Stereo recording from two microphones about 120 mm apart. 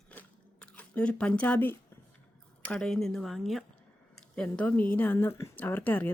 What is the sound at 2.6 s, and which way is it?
Speech, 5° left (ahead or behind).